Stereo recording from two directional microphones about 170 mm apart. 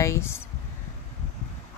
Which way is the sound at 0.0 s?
15° left (ahead or behind).